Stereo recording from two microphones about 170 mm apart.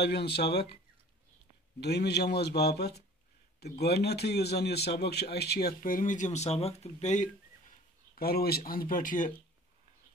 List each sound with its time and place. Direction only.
0.0 s a man's voice: 75° left (ahead or behind)
1.8 s a man's voice: 75° left (ahead or behind); by 7.2 s 45° left (ahead or behind)
8.2 s speech: 65° left (ahead or behind)